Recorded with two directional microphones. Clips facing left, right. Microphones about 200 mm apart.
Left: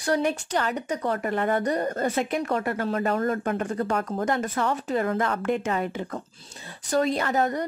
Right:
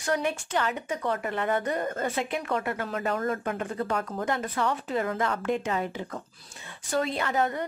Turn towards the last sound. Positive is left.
turn(degrees=40)  # may be behind; listen again after turning